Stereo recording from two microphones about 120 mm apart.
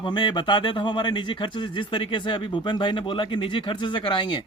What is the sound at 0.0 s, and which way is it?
Speech, 40° left (ahead or behind).